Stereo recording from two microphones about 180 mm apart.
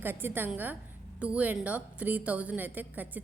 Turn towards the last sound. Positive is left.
turn(degrees=-10)  # may be behind; listen again after turning